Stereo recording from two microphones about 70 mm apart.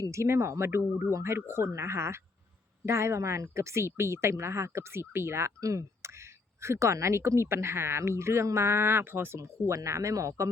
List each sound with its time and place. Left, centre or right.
0.0 s speech: right
5.5 s speech: right
9.6 s speech: right